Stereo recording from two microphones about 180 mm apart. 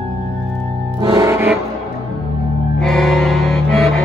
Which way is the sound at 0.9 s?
20° right (ahead or behind).